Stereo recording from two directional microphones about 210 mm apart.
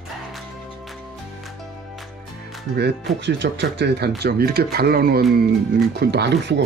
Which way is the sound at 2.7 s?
50° right (ahead or behind).